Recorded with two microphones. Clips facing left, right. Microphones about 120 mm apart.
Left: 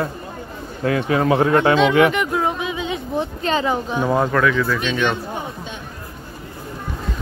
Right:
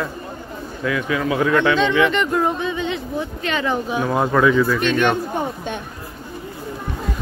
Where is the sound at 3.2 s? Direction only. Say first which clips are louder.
Left 6 dB; 35° left (ahead or behind).